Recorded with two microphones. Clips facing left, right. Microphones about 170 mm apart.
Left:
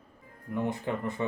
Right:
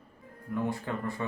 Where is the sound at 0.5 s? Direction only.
20° left (ahead or behind).